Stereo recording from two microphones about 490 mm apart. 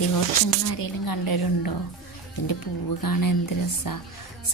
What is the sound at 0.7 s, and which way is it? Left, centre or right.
Speech, left.